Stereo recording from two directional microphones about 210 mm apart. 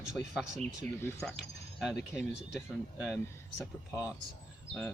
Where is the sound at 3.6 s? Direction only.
5° right (ahead or behind).